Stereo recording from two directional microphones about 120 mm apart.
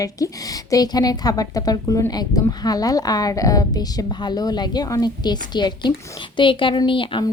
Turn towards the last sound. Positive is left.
turn(degrees=45)  # may be behind; listen again after turning